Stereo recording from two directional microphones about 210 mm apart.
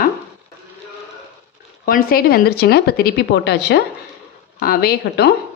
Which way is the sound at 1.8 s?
45° left (ahead or behind).